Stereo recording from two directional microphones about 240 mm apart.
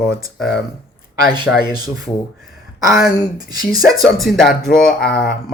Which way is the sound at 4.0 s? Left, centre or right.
Centre.